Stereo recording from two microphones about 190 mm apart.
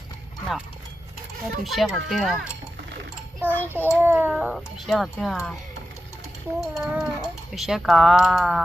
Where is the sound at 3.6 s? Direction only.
10° right (ahead or behind).